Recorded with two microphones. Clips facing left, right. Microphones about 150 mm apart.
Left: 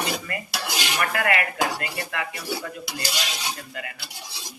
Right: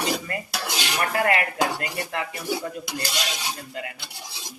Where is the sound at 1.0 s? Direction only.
30° right (ahead or behind).